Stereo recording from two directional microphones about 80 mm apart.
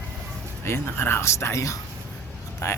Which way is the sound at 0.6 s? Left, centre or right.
Left.